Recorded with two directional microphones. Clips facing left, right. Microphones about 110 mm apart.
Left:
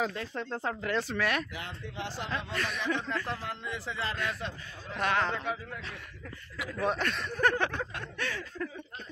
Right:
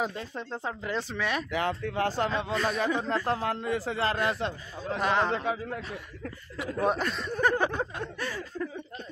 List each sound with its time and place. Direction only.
0.0 s speech: 10° right (ahead or behind)
1.5 s speech: 55° right (ahead or behind)
2.3 s a man's voice: 35° right (ahead or behind)
5.1 s a man's voice: 25° right (ahead or behind)
6.9 s speech: 5° right (ahead or behind)
7.4 s a sound: 10° right (ahead or behind)